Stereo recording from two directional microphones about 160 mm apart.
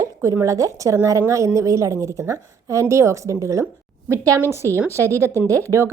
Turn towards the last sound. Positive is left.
turn(degrees=-15)  # may be behind; listen again after turning